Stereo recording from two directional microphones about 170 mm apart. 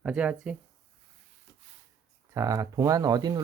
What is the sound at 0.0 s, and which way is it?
Speech, 5° right (ahead or behind).